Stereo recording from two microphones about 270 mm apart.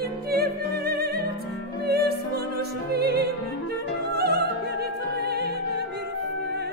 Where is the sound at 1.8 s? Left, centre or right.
Right.